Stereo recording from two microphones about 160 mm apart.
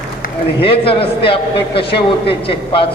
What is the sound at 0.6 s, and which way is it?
A man's voice, 35° left (ahead or behind).